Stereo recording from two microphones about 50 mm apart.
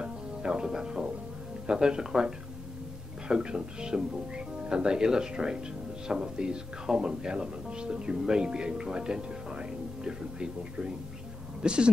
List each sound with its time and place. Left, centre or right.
0.0 s music: centre
1.7 s speech: centre